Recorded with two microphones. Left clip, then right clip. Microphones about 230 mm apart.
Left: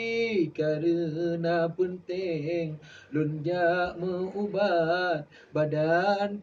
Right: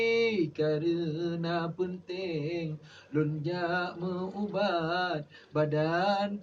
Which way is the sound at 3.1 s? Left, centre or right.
Centre.